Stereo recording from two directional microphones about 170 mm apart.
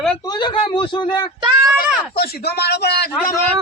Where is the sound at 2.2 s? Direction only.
70° left (ahead or behind).